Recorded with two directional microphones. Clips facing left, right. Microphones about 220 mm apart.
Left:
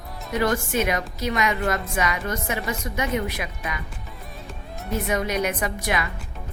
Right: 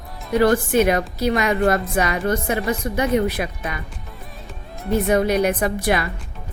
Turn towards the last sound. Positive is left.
turn(degrees=-35)  # may be behind; listen again after turning